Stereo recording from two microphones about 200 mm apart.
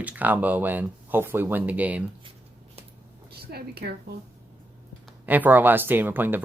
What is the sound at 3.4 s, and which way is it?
Speech, 50° right (ahead or behind).